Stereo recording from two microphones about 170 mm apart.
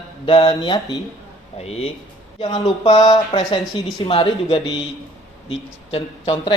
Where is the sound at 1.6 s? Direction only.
35° left (ahead or behind).